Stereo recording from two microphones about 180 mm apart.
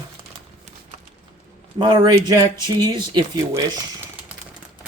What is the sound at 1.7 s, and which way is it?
Speech, 25° right (ahead or behind).